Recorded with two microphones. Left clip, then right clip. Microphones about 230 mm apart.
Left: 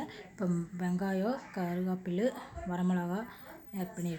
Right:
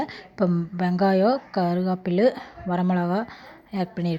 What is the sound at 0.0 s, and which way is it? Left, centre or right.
A woman's voice, right.